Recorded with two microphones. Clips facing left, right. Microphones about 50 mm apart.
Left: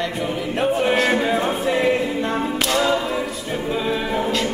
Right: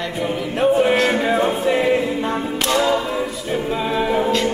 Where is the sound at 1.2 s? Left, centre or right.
Centre.